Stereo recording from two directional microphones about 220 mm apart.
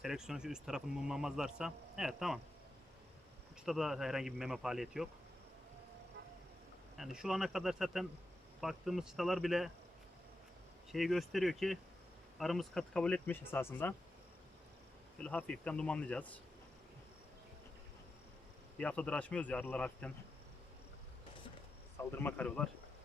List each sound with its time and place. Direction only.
0.0 s speech: 5° right (ahead or behind)
3.7 s speech: centre (ahead or behind)
6.9 s speech: centre (ahead or behind)
10.9 s speech: centre (ahead or behind)
15.2 s speech: 5° left (ahead or behind)
18.8 s speech: 5° left (ahead or behind)
21.9 s speech: 10° left (ahead or behind)